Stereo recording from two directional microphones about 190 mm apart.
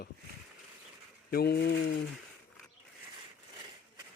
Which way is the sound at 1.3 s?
55° left (ahead or behind).